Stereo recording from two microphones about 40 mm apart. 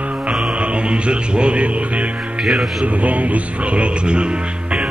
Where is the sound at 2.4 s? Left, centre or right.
Centre.